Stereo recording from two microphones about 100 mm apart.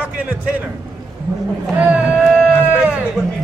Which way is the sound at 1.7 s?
20° right (ahead or behind).